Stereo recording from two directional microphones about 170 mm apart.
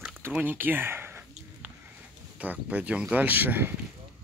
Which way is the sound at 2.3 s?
10° right (ahead or behind).